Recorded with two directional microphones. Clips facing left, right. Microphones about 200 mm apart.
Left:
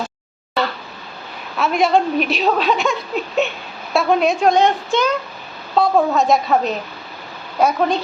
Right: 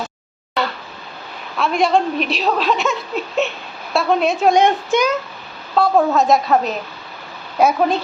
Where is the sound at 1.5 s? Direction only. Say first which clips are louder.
Even; centre (ahead or behind); by 5.1 s 15° right (ahead or behind).